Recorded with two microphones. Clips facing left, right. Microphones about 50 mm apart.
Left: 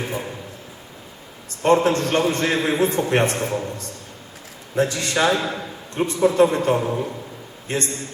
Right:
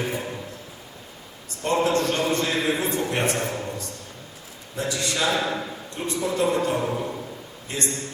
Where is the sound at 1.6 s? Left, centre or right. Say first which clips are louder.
Left 4 dB; left.